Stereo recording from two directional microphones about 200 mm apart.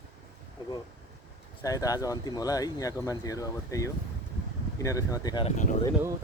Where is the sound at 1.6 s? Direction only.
15° left (ahead or behind).